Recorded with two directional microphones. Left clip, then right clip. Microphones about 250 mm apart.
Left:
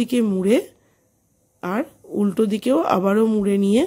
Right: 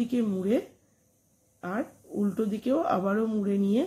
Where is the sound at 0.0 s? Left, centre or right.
Left.